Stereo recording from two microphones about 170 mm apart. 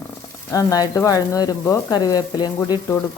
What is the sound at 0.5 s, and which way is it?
Speech, 20° left (ahead or behind).